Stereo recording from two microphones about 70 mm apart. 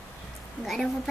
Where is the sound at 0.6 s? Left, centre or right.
Centre.